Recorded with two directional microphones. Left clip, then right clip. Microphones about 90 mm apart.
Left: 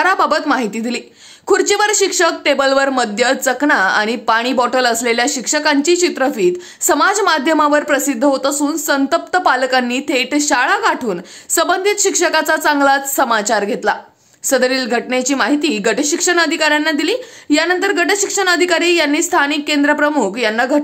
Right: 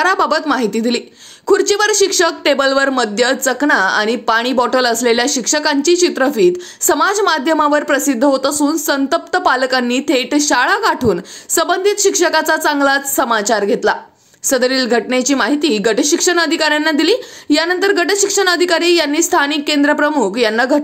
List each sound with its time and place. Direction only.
0.0 s speech: 25° right (ahead or behind)
10.6 s a woman's voice: 40° right (ahead or behind)
11.5 s a woman's voice: 25° right (ahead or behind)